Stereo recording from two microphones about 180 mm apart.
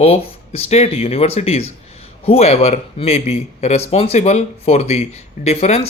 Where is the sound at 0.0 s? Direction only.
35° left (ahead or behind).